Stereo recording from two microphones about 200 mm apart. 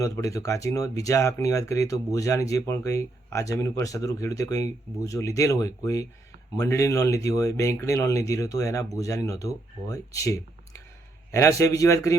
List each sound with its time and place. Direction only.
0.0 s speech: 15° left (ahead or behind)